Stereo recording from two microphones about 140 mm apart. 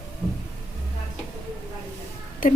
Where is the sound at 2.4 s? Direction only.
80° left.